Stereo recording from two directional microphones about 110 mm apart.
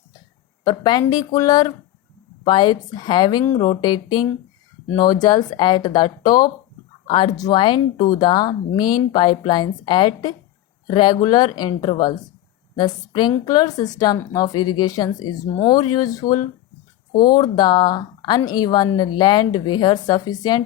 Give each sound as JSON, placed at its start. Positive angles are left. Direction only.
{"t": 0.6, "sound": "speech", "side_deg": 40}
{"t": 3.5, "sound": "speech", "side_deg": 90}
{"t": 3.8, "sound": "speech", "side_deg": 40}
{"t": 7.0, "sound": "a sound", "side_deg": 60}
{"t": 7.3, "sound": "speech", "side_deg": 40}